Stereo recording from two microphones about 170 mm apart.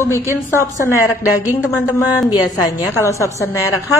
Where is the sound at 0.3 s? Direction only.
15° right (ahead or behind).